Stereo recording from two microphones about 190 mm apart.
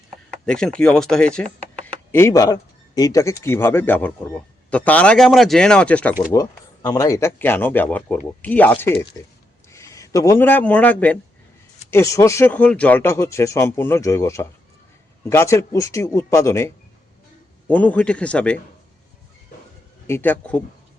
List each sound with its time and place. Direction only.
0.3 s speech: 5° left (ahead or behind)
2.1 s speech: 15° left (ahead or behind)
6.3 s a man's voice: 20° left (ahead or behind)
20.1 s speech: 10° left (ahead or behind)